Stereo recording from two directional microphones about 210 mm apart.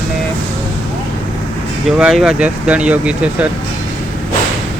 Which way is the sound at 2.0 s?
Centre (ahead or behind).